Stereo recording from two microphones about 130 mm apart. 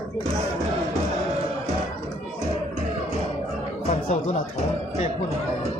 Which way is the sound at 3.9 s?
60° left (ahead or behind).